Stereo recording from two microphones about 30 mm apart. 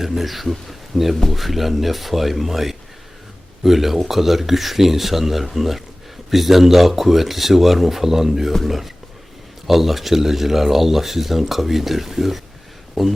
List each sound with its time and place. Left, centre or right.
0.0 s speech: centre
0.7 s a sound: centre
1.3 s speech: centre